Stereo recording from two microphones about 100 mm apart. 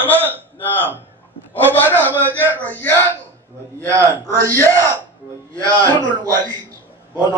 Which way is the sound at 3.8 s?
30° right (ahead or behind).